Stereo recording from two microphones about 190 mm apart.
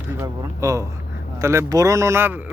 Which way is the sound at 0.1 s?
15° right (ahead or behind).